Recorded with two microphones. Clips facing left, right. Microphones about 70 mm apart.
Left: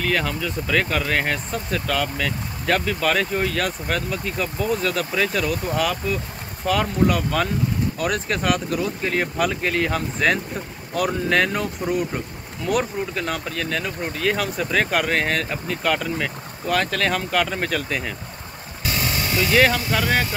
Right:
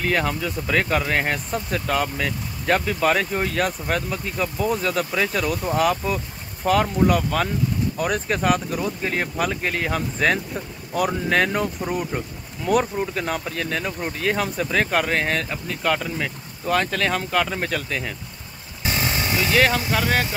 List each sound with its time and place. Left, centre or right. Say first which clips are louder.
0.0 s speech: right 1 dB; centre
18.9 s vehicle: right 1 dB; right
19.6 s speech: left 1 dB; centre